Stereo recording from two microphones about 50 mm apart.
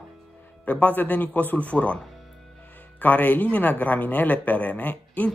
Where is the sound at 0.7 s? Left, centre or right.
Left.